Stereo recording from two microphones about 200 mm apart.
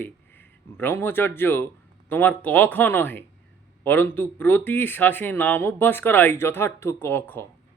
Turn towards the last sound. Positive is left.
turn(degrees=10)  # may be behind; listen again after turning